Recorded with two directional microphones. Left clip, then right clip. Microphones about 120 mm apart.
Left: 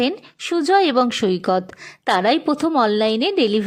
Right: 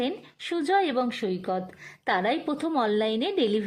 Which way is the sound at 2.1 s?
30° left (ahead or behind).